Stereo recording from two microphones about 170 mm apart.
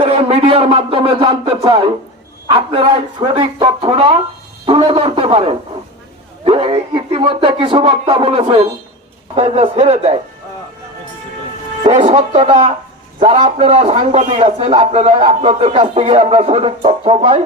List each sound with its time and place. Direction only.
0.0 s a man's voice: 35° right (ahead or behind)
11.8 s a man's voice: 40° right (ahead or behind)